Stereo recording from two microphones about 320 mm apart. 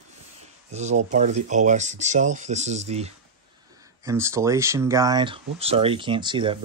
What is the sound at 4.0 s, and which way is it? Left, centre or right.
Speech, centre.